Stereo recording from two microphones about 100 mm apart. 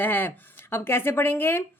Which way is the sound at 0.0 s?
20° left (ahead or behind).